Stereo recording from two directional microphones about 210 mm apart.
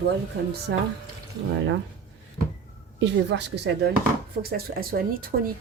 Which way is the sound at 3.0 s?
55° right (ahead or behind).